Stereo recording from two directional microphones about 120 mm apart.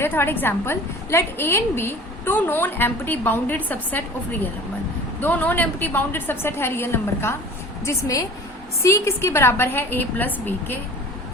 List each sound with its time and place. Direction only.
0.0 s a woman's voice: 20° left (ahead or behind)